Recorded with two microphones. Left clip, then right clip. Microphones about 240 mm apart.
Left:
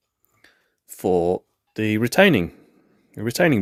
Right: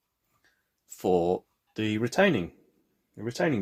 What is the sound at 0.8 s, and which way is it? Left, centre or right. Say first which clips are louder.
Speech: left 5 dB; left.